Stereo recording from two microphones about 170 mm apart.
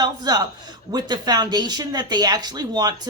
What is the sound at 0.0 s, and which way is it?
A man's voice, 25° right (ahead or behind).